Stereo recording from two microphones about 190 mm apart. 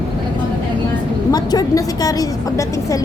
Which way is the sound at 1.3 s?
20° left (ahead or behind).